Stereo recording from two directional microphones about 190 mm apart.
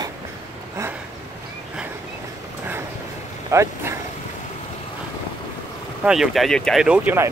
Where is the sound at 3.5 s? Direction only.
15° right (ahead or behind).